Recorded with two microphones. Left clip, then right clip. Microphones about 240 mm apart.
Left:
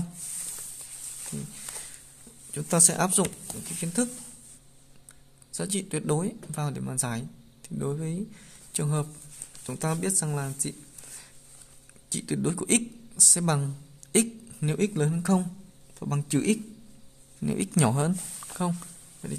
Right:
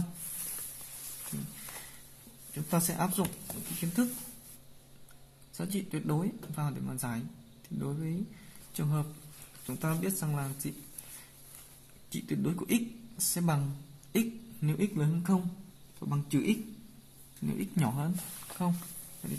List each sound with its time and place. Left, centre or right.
2.5 s speech: left
5.5 s speech: left
18.6 s speech: left